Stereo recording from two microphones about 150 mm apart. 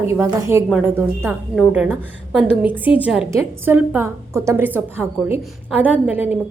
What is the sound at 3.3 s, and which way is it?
A woman's voice, 20° right (ahead or behind).